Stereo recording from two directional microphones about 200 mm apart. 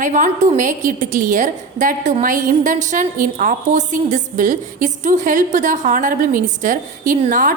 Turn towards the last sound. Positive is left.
turn(degrees=-40)  # may be behind; listen again after turning